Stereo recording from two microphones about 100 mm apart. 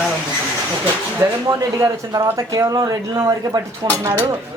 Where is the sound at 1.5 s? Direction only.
35° right (ahead or behind).